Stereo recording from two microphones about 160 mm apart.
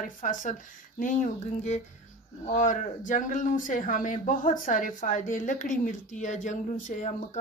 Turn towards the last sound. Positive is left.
turn(degrees=50)  # may be behind; listen again after turning